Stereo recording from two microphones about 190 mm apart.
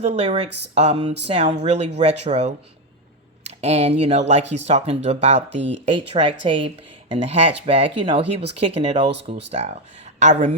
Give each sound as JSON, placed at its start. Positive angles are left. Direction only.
{"t": 0.0, "sound": "speech", "side_deg": -35}